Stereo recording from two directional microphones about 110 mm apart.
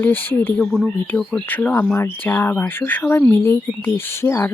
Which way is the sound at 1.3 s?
15° left (ahead or behind).